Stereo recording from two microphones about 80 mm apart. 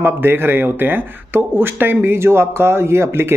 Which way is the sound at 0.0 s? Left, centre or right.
Right.